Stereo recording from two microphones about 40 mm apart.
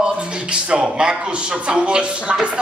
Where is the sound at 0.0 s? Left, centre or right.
Right.